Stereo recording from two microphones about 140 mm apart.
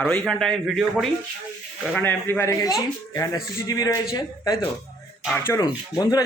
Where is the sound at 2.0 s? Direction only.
15° left (ahead or behind).